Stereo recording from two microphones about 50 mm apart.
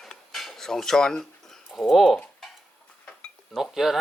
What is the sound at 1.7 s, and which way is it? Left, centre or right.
Speech, centre.